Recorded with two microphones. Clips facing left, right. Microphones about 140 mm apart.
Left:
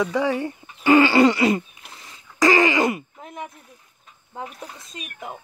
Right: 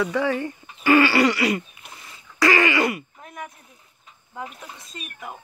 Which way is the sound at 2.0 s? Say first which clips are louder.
Left 2 dB; 15° left (ahead or behind).